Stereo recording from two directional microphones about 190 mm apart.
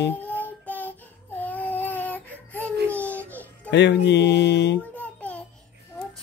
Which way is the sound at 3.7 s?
65° left (ahead or behind).